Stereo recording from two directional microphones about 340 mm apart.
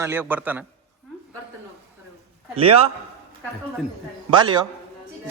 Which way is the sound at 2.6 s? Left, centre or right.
Centre.